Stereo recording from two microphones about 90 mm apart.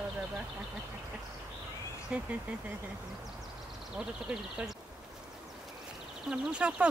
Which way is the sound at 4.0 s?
5° right (ahead or behind).